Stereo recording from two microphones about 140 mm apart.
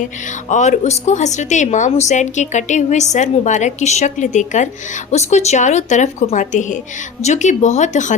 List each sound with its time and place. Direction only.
0.5 s a woman's voice: 60° left (ahead or behind)